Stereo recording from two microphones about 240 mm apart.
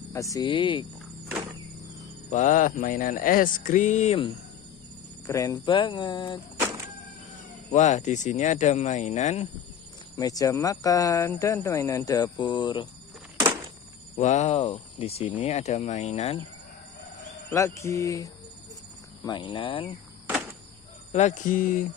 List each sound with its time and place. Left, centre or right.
0.1 s speech: centre
2.3 s speech: left
5.2 s speech: centre
7.7 s speech: left
10.1 s speech: centre
14.1 s speech: left
17.3 s speech: centre
21.1 s speech: left